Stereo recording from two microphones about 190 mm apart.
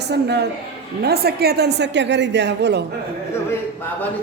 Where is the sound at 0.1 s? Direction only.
60° right (ahead or behind).